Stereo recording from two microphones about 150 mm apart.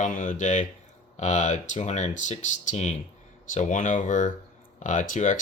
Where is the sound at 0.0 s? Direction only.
55° left (ahead or behind).